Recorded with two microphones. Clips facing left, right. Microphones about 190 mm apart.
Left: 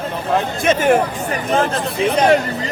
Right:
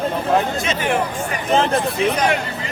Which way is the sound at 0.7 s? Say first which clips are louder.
Left 7 dB; 45° left (ahead or behind).